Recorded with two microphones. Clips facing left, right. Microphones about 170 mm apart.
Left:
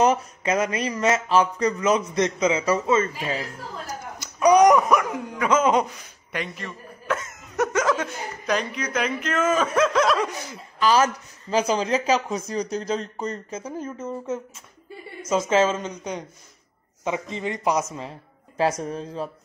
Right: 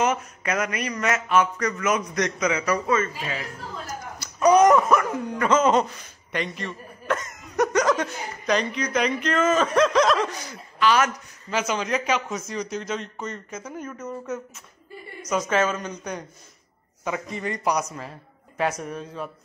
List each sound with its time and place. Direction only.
0.0 s a woman's voice: 35° left (ahead or behind)
4.2 s a sound: 15° left (ahead or behind)
4.8 s speech: 10° left (ahead or behind)
10.8 s speech: 35° left (ahead or behind)